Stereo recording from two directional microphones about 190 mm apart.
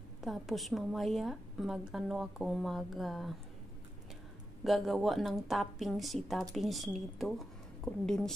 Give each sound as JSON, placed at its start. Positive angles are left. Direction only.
{"t": 0.2, "sound": "a woman's voice", "side_deg": 0}
{"t": 4.6, "sound": "a woman's voice", "side_deg": 0}